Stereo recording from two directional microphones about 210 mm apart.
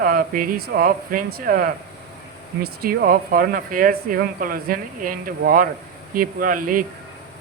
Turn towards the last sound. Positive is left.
turn(degrees=-40)  # may be behind; listen again after turning